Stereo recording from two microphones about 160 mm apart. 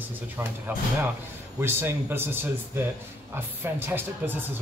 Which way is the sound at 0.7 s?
15° right (ahead or behind).